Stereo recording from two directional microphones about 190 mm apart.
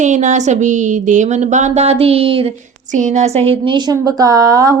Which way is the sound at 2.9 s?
40° right (ahead or behind).